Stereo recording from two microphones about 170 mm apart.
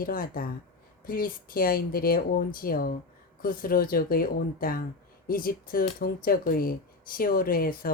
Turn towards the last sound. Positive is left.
turn(degrees=60)  # may be behind; listen again after turning